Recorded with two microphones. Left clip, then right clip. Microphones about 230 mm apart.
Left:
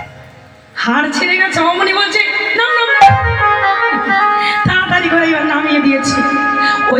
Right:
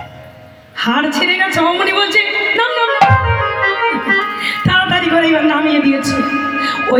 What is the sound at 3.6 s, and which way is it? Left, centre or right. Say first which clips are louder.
Organ: left 2 dB; right.